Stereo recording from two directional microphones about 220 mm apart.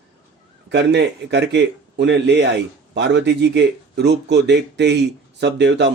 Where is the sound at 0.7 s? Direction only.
50° right (ahead or behind).